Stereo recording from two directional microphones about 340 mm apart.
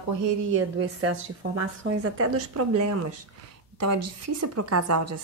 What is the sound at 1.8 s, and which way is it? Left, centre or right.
A woman's voice, right.